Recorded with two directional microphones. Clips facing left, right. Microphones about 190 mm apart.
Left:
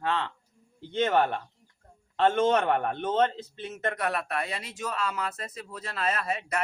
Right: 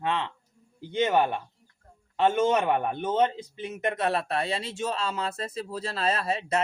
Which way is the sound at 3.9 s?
25° right (ahead or behind).